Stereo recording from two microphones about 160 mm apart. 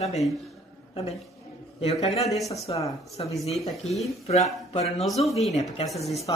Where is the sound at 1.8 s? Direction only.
40° left (ahead or behind).